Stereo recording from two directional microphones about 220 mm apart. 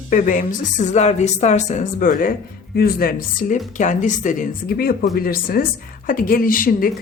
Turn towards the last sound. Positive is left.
turn(degrees=40)  # may be behind; listen again after turning